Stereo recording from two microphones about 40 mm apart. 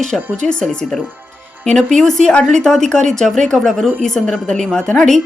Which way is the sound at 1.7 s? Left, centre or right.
Centre.